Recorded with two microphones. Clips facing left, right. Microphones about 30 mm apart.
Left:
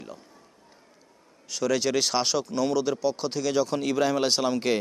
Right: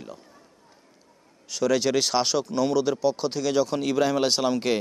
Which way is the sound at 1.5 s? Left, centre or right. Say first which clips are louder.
Right 2 dB; centre.